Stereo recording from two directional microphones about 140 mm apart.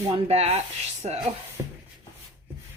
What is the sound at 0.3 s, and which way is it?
Speech, 50° right (ahead or behind).